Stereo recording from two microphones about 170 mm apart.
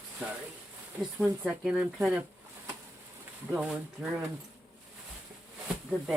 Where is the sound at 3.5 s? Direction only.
5° right (ahead or behind).